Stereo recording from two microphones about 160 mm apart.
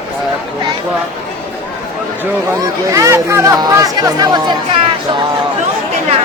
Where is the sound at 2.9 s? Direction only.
20° right (ahead or behind).